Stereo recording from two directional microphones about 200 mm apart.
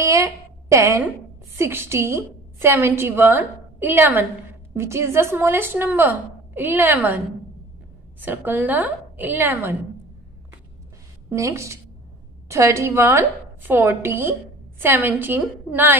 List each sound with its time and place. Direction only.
0.0 s a woman's voice: 15° right (ahead or behind)
8.2 s a woman's voice: 10° right (ahead or behind)
11.2 s a woman's voice: 15° right (ahead or behind)